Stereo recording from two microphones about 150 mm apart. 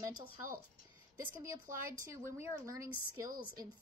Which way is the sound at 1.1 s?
20° right (ahead or behind).